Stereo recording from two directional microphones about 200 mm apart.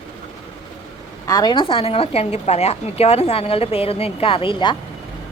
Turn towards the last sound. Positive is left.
turn(degrees=25)  # may be behind; listen again after turning